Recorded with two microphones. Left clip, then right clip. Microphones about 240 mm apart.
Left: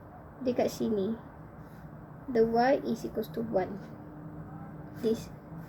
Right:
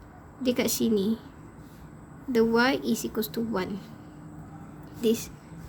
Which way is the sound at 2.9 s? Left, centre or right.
Right.